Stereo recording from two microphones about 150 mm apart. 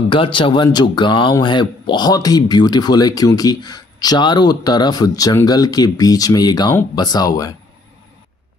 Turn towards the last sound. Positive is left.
turn(degrees=25)  # may be behind; listen again after turning